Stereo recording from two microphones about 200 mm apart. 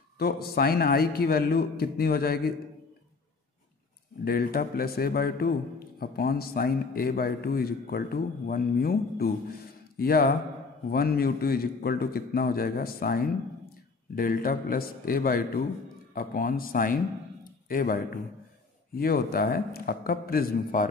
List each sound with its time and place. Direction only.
0.2 s a man's voice: 50° left (ahead or behind)
4.2 s a man's voice: 50° left (ahead or behind)